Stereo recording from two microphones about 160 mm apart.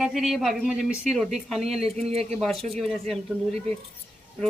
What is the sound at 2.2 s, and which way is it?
Speech, centre (ahead or behind).